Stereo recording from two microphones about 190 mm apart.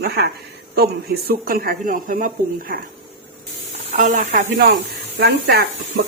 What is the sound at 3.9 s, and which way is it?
Speech, 40° right (ahead or behind).